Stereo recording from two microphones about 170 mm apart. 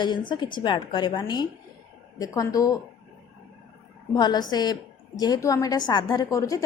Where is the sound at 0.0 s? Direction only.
25° left (ahead or behind).